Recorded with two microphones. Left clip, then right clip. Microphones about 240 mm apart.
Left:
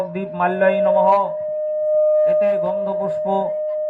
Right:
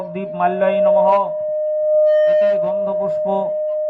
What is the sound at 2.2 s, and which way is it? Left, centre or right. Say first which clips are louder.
Music: right 2 dB; left.